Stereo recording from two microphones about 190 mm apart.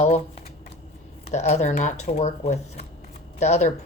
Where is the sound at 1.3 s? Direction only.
35° left (ahead or behind).